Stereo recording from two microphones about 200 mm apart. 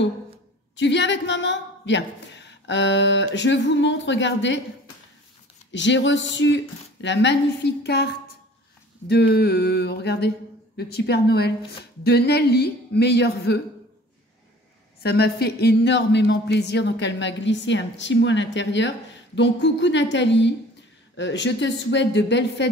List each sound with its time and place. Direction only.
0.7 s speech: 60° left (ahead or behind)
5.7 s speech: 65° left (ahead or behind)
9.0 s a sound: 50° left (ahead or behind)
12.0 s speech: 55° left (ahead or behind)
15.0 s speech: 55° left (ahead or behind)